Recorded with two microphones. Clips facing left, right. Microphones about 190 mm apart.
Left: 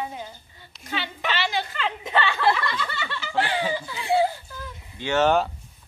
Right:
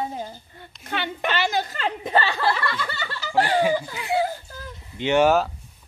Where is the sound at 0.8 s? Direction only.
55° right (ahead or behind).